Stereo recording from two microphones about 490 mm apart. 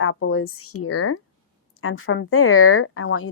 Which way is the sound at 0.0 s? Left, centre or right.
Left.